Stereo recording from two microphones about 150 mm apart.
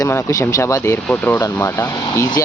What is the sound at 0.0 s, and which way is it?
Speech, 20° left (ahead or behind).